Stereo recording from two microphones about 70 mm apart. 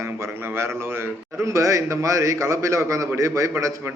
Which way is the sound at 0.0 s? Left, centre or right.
Right.